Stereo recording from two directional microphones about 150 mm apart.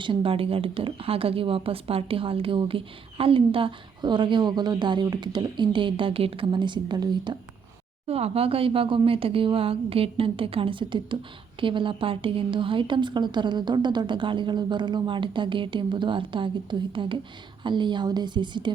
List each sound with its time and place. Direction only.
0.0 s speech: 35° right (ahead or behind)
8.0 s speech: 40° right (ahead or behind)